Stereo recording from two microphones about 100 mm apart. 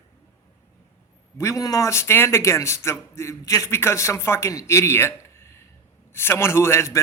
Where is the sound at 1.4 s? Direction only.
30° left (ahead or behind).